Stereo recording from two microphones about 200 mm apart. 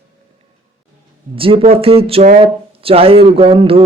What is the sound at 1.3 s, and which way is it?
Speech, 25° right (ahead or behind).